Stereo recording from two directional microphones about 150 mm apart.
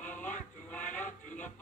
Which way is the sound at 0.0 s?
10° left (ahead or behind).